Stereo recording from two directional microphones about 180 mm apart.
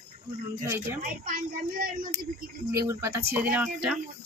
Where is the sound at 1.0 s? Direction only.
50° right (ahead or behind).